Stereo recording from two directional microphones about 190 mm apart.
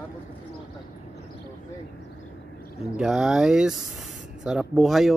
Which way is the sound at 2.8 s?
Centre (ahead or behind).